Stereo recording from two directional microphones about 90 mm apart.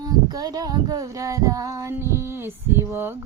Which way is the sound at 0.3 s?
45° right (ahead or behind).